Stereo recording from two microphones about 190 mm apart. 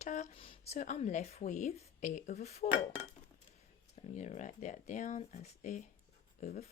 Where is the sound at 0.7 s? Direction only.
40° left (ahead or behind).